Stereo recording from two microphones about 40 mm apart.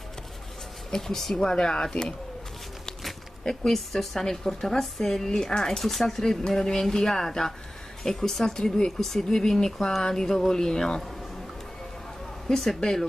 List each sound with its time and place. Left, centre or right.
0.9 s speech: centre
1.3 s speech: left
3.0 s a sound: centre
3.6 s speech: centre
12.4 s speech: centre